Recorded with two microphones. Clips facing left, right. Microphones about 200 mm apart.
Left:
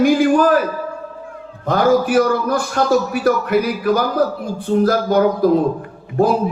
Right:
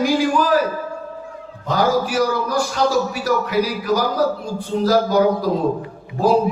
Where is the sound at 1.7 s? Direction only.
55° left (ahead or behind).